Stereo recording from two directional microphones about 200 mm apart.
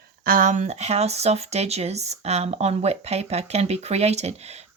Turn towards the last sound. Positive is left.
turn(degrees=-30)  # may be behind; listen again after turning